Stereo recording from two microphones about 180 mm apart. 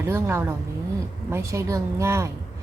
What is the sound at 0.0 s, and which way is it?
A woman's voice, 15° right (ahead or behind).